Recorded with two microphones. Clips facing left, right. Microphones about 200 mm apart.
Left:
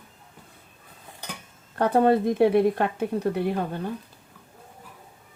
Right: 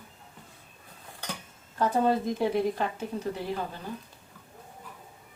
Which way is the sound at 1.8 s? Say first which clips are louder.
Left 5 dB; 60° left (ahead or behind).